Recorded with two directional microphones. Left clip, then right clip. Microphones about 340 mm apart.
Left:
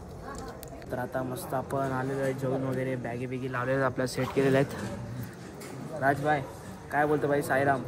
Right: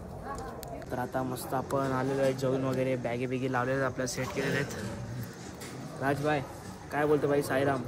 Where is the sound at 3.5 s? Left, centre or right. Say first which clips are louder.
Left 3 dB; centre.